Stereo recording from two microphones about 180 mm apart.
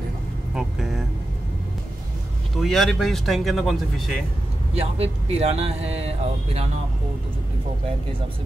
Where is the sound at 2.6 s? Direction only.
Centre (ahead or behind).